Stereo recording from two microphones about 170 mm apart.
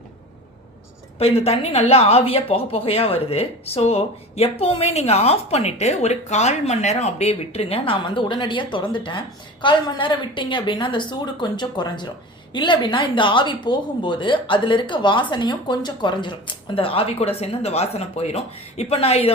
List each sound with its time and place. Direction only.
1.2 s speech: 35° left (ahead or behind)